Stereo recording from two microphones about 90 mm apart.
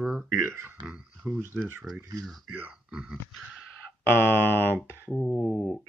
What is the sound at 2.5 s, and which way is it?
Speech, 15° right (ahead or behind).